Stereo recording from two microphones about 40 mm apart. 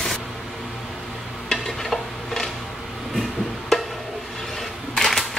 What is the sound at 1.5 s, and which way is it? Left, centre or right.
Stir, centre.